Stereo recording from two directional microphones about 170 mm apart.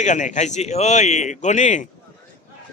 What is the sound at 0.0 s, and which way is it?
A man's voice, 45° left (ahead or behind).